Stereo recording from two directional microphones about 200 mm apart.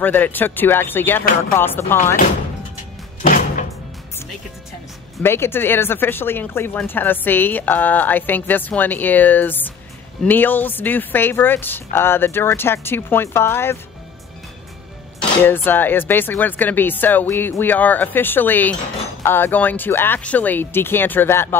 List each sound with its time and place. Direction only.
0.0 s speech: 10° left (ahead or behind)
3.2 s music: 40° left (ahead or behind)
5.2 s speech: 10° left (ahead or behind)
15.1 s speech: 10° left (ahead or behind)